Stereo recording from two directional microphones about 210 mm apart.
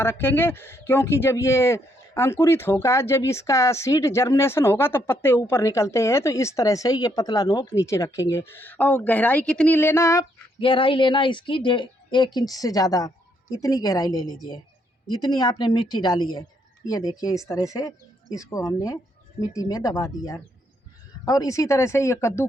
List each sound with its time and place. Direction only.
0.0 s speech: 10° left (ahead or behind)
10.6 s a woman's voice: 25° left (ahead or behind)